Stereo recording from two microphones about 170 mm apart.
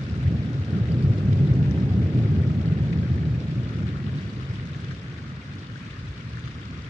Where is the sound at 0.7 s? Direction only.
5° right (ahead or behind).